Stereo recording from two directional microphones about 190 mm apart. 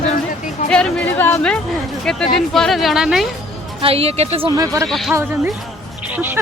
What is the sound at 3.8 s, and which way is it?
Speech, 30° right (ahead or behind).